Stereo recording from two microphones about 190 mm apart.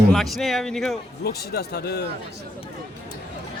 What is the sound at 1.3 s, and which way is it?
Speech, 55° left (ahead or behind).